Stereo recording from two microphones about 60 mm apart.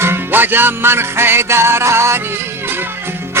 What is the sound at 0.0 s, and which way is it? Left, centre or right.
Music, right.